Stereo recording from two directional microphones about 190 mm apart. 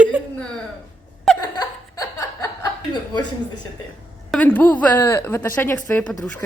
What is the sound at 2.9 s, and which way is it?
Speech, 20° left (ahead or behind).